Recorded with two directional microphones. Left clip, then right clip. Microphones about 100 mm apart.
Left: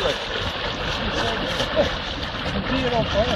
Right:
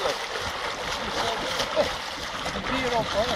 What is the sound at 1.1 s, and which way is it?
Vehicle, 20° right (ahead or behind).